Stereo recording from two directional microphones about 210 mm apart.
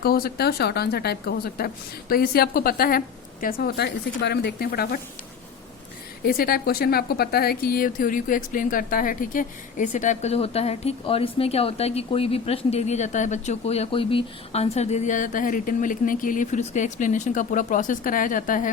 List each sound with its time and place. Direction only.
0.0 s a woman's voice: 45° left (ahead or behind)
6.2 s a woman's voice: 45° left (ahead or behind)